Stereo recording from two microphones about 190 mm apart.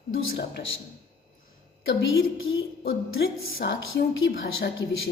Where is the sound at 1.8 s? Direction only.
90° left.